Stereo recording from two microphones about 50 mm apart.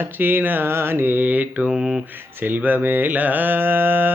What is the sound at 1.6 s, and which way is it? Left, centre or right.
Mantra, centre.